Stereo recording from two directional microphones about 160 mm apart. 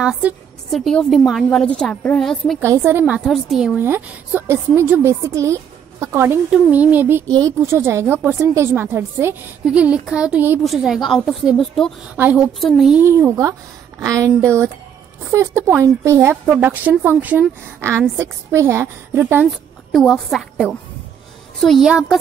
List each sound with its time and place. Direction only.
0.0 s a woman's voice: 5° right (ahead or behind)
2.6 s a woman's voice: 15° right (ahead or behind)
3.3 s a woman's voice: centre (ahead or behind)
13.0 s a woman's voice: 15° right (ahead or behind)
19.9 s a woman's voice: centre (ahead or behind)